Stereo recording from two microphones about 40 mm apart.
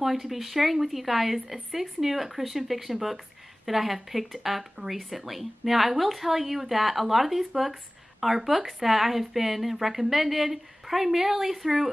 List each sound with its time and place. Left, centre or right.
0.0 s speech: centre